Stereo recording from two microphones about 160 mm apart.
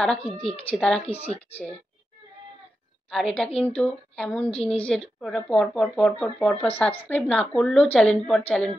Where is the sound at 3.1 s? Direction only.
5° left (ahead or behind).